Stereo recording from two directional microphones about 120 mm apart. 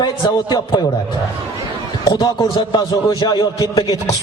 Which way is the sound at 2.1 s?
40° left (ahead or behind).